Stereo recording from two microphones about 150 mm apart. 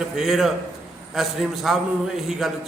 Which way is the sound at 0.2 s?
Centre (ahead or behind).